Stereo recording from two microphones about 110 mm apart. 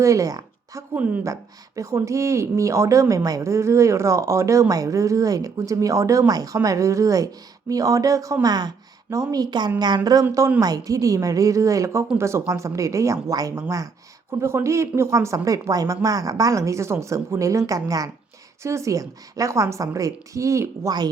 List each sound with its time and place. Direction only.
0.0 s a woman's voice: 30° right (ahead or behind)
0.9 s speech: 15° right (ahead or behind)
1.2 s speech: 30° right (ahead or behind)